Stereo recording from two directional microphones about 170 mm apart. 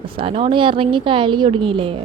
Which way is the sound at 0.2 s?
35° right (ahead or behind).